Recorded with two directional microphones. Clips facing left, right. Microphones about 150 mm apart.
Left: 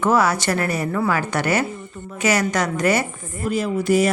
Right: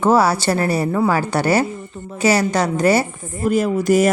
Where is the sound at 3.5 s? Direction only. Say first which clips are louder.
Right 3 dB; 45° right (ahead or behind).